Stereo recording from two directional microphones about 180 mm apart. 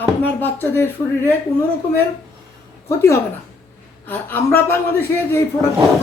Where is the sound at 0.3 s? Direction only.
10° left (ahead or behind).